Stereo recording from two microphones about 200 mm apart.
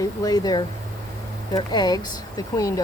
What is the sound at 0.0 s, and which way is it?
Speech, 20° left (ahead or behind).